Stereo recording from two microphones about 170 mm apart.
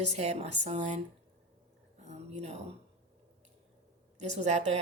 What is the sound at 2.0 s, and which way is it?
Speech, 40° right (ahead or behind).